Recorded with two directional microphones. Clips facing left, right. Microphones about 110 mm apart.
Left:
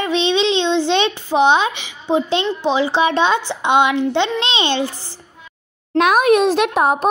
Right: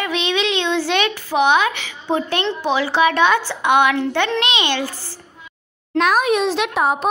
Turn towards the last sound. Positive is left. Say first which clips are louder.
# left 3 dB
turn(degrees=45)  # may be behind; listen again after turning